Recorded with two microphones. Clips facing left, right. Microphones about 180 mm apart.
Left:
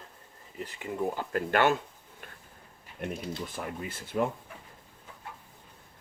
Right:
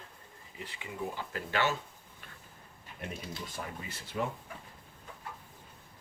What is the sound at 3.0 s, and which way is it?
Speech, 55° left (ahead or behind).